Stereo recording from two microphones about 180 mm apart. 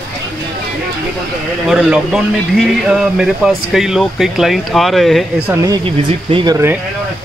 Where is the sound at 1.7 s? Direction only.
5° right (ahead or behind).